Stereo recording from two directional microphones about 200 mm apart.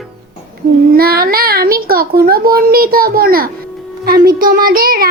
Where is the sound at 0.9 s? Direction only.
50° right (ahead or behind).